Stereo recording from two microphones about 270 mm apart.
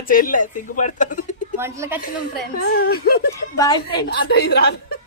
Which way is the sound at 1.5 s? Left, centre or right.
Centre.